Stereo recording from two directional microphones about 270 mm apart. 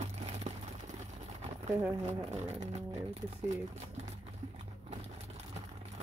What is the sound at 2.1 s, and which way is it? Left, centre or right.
Speech, right.